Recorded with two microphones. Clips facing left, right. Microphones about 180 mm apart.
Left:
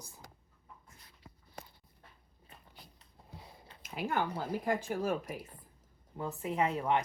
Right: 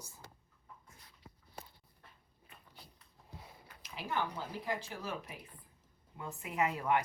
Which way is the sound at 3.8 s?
50° left (ahead or behind).